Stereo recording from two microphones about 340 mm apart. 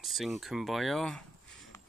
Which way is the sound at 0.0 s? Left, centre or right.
Centre.